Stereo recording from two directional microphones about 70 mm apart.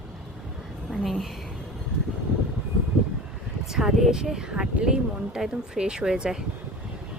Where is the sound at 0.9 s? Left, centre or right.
Centre.